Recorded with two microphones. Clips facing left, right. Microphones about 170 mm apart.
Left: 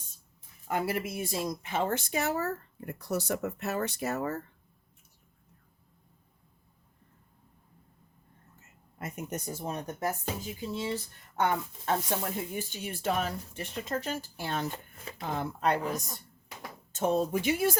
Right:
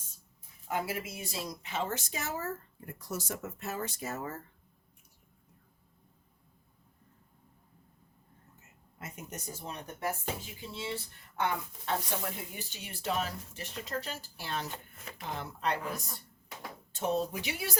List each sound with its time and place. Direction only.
0.7 s speech: 60° left (ahead or behind)
9.0 s a woman's voice: 55° left (ahead or behind)